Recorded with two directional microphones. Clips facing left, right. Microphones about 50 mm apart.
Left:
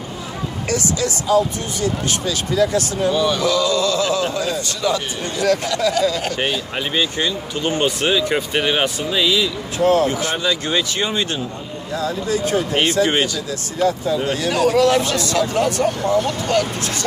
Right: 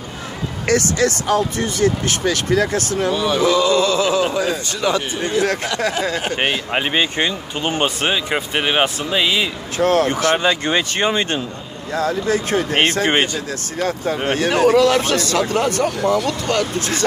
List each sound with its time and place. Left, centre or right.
0.7 s speech: right
3.1 s speech: centre
3.4 s speech: right
9.8 s speech: right
13.7 s speech: right